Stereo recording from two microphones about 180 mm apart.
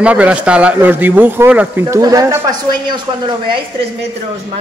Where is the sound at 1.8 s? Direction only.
20° right (ahead or behind).